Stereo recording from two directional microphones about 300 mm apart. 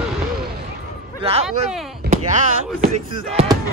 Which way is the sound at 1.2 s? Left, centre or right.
Centre.